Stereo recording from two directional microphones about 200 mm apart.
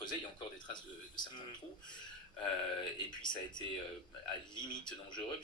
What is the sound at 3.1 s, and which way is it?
A man's voice, 20° left (ahead or behind).